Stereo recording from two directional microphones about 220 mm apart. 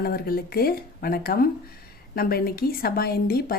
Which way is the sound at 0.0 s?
45° left (ahead or behind).